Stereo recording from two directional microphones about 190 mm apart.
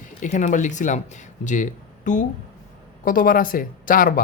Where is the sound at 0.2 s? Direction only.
40° left (ahead or behind).